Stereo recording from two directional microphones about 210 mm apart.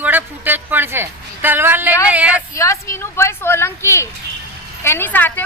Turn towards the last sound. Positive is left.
turn(degrees=10)  # may be behind; listen again after turning